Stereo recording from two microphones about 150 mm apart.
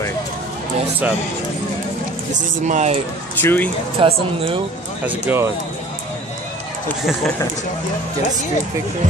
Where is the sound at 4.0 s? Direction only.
35° right (ahead or behind).